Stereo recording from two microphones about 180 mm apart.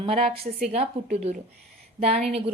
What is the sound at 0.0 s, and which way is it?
A woman's voice, 30° right (ahead or behind).